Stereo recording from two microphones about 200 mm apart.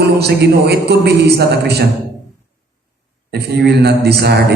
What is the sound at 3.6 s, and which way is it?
Speech, 55° right (ahead or behind).